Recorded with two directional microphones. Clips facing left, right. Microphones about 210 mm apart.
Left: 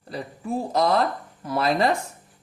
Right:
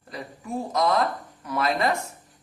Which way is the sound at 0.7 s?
35° left (ahead or behind).